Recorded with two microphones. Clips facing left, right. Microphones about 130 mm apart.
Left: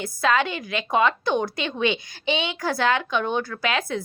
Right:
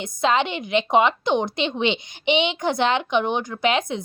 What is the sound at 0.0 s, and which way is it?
A woman's voice, 20° right (ahead or behind).